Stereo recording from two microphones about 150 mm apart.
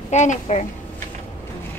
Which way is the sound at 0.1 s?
50° left (ahead or behind).